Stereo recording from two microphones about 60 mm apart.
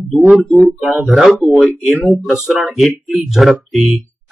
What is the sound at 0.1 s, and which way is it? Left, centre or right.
Speech, centre.